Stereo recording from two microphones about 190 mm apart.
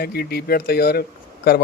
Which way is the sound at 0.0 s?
55° left (ahead or behind).